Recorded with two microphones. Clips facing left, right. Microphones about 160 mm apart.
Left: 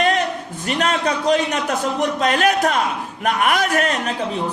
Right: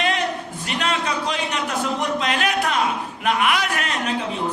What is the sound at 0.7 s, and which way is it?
A man's voice, 45° left (ahead or behind).